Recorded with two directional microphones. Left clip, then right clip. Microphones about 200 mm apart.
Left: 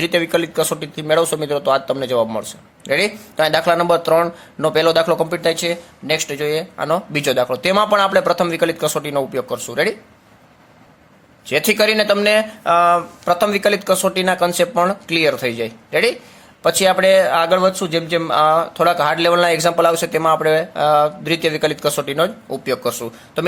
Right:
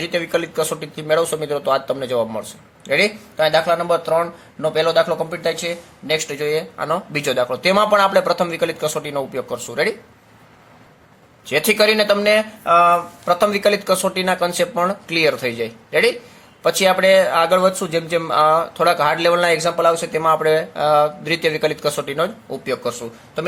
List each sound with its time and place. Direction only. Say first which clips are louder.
0.0 s speech: left 3 dB; 20° left (ahead or behind)
11.4 s speech: even; 10° left (ahead or behind)